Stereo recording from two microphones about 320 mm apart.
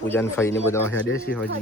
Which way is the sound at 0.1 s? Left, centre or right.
Centre.